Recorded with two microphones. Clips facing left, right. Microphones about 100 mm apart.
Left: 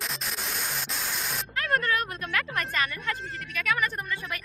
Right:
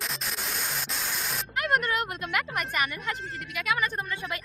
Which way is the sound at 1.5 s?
15° right (ahead or behind).